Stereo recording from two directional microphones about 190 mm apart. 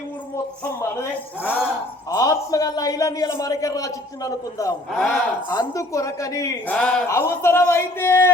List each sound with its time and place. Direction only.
0.6 s a man's voice: 15° left (ahead or behind)
2.0 s a man's voice: 20° left (ahead or behind)
4.9 s a man's voice: 5° left (ahead or behind)
5.5 s a man's voice: 20° left (ahead or behind)
6.7 s a man's voice: 5° left (ahead or behind)